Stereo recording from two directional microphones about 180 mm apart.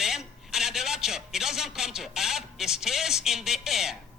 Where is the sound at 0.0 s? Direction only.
Centre (ahead or behind).